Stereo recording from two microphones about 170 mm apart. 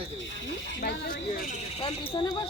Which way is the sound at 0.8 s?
75° left (ahead or behind).